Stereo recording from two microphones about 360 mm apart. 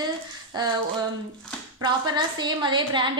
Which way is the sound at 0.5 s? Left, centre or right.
Centre.